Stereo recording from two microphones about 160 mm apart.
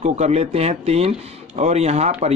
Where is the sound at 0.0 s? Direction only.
45° right (ahead or behind).